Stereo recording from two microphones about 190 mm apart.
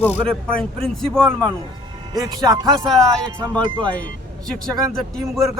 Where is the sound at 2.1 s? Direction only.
20° right (ahead or behind).